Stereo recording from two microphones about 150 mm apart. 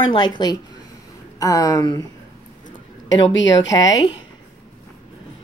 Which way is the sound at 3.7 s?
25° left (ahead or behind).